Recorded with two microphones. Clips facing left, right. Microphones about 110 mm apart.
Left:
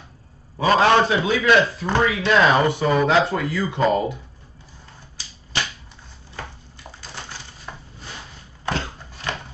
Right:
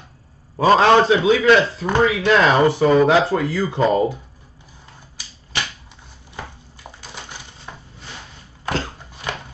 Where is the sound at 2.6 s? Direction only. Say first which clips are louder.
Right 5 dB; 25° right (ahead or behind).